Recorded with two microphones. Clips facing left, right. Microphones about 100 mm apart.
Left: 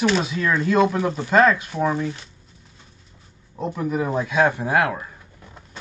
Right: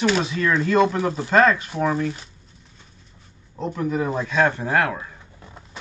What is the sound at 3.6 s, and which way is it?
Speech, 10° left (ahead or behind).